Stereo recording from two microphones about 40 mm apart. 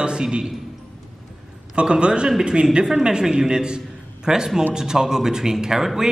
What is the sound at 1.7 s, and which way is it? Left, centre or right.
A man's voice, right.